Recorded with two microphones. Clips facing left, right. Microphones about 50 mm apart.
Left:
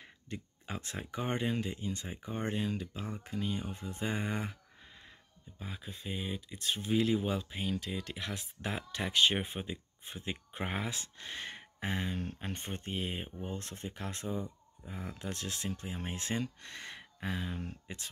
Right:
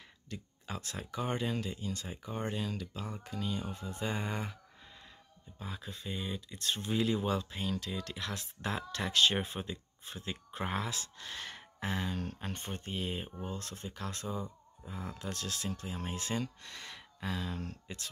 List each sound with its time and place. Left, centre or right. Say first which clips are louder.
0.3 s speech: left 1 dB; left
5.6 s speech: right 1 dB; centre
12.2 s speech: even; centre
12.5 s speech: left 2 dB; left